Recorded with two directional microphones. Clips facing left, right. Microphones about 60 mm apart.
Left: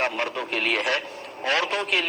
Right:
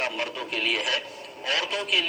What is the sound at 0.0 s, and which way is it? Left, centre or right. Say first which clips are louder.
A man's voice: left 4 dB; left.